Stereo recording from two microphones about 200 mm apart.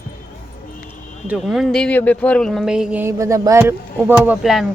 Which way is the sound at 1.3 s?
Centre (ahead or behind).